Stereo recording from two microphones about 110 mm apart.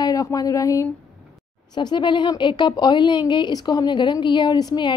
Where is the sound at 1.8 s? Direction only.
45° left (ahead or behind).